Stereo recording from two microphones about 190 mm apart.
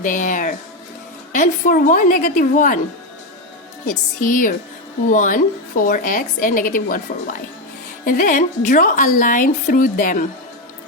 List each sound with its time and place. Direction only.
0.0 s a woman's voice: 45° left (ahead or behind)
3.8 s a woman's voice: 45° left (ahead or behind)
8.0 s a woman's voice: 45° left (ahead or behind)